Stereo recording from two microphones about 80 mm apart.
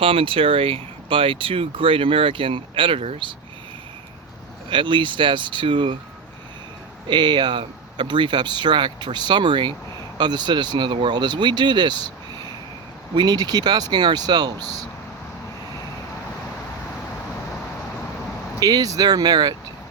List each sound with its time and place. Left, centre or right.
1.1 s speech: right
4.7 s speech: right
7.1 s speech: right
10.2 s speech: right
18.6 s speech: right